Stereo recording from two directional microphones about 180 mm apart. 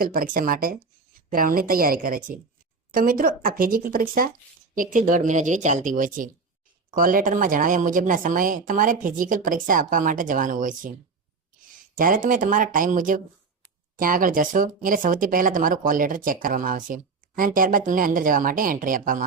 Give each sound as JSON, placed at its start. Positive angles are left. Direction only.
{"t": 0.0, "sound": "speech", "side_deg": -50}